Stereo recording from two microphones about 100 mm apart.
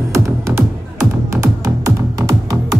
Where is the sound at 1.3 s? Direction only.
35° right (ahead or behind).